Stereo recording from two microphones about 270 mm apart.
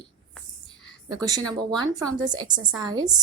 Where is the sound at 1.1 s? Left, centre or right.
Centre.